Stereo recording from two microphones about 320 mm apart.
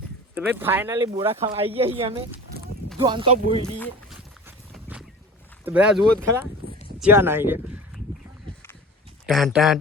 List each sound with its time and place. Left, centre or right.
0.3 s speech: centre
3.8 s a sound: centre
5.6 s speech: centre
6.6 s a sound: left
7.0 s speech: centre
9.2 s speech: centre